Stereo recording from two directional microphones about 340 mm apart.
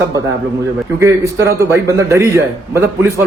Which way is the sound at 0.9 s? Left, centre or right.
Centre.